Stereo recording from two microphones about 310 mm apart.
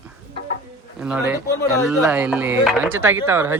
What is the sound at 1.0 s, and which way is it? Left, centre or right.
Speech, centre.